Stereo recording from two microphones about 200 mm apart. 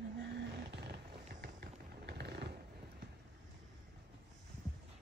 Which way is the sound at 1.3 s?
50° right (ahead or behind).